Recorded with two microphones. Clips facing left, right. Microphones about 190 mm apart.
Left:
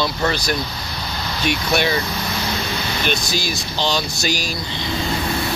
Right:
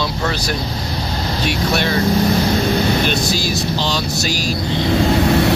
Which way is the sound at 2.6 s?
50° right (ahead or behind).